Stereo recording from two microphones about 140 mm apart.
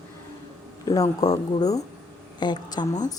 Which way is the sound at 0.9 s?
25° left (ahead or behind).